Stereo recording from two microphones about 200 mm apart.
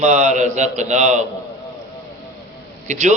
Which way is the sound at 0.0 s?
35° right (ahead or behind).